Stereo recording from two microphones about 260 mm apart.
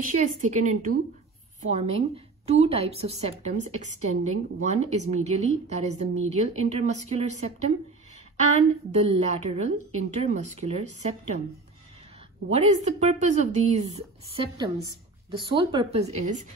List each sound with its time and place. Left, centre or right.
0.1 s a woman's voice: right
8.9 s a woman's voice: right
12.4 s a woman's voice: right